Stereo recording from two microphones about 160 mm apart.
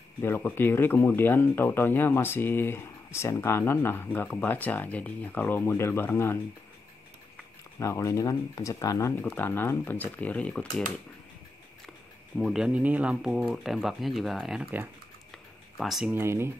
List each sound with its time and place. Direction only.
0.2 s speech: 10° left (ahead or behind)
7.8 s speech: 20° left (ahead or behind)
12.4 s speech: centre (ahead or behind)
16.1 s speech: 15° right (ahead or behind)